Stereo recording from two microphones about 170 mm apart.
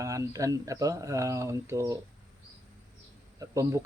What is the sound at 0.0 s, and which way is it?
Speech, 20° right (ahead or behind).